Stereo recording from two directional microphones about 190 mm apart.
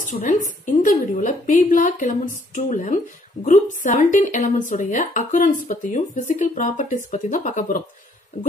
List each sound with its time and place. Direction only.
0.0 s a woman's voice: 45° left (ahead or behind)